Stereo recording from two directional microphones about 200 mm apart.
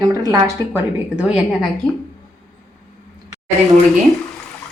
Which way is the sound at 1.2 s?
5° right (ahead or behind).